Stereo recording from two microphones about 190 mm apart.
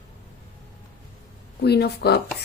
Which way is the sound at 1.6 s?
60° left (ahead or behind).